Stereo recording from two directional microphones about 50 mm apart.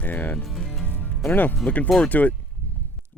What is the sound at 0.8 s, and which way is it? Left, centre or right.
Music, left.